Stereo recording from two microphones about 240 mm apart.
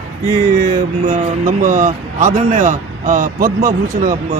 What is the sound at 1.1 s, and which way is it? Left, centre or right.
Speech, right.